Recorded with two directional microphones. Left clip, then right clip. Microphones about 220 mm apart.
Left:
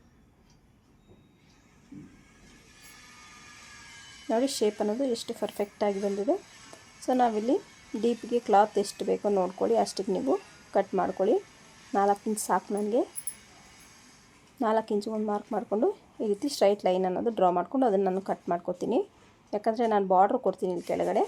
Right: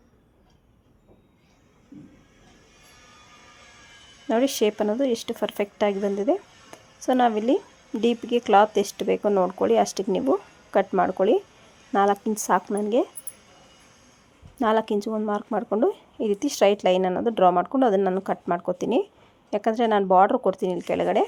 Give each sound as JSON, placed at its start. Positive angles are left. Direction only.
{"t": 4.3, "sound": "speech", "side_deg": -15}
{"t": 7.0, "sound": "speech", "side_deg": -15}
{"t": 14.6, "sound": "speech", "side_deg": -15}